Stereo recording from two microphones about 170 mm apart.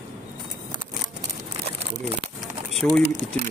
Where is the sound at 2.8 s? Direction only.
10° left (ahead or behind).